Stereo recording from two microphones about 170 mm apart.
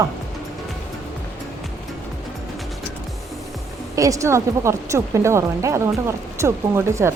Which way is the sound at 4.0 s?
20° right (ahead or behind).